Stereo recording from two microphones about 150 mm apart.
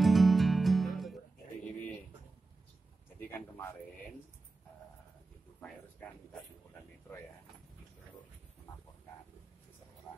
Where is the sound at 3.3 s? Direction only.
15° left (ahead or behind).